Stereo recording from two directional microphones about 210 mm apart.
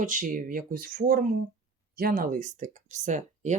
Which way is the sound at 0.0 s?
40° right (ahead or behind).